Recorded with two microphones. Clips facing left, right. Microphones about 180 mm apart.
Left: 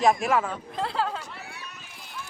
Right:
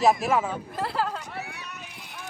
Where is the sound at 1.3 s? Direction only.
65° right (ahead or behind).